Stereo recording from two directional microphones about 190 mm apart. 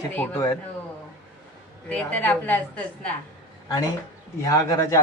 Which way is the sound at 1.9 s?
10° left (ahead or behind).